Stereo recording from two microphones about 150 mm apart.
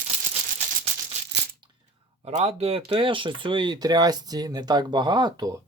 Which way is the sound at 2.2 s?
45° right (ahead or behind).